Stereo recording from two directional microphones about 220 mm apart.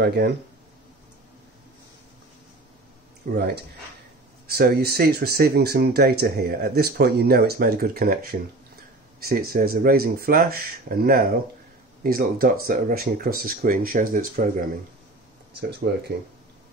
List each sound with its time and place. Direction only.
0.0 s speech: 45° right (ahead or behind)
3.3 s speech: 45° right (ahead or behind)
15.8 s speech: 50° right (ahead or behind)